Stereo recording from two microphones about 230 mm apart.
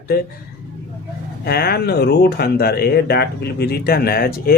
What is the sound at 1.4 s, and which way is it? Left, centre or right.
Speech, left.